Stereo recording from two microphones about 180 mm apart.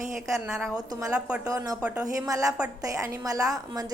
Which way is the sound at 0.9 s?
15° right (ahead or behind).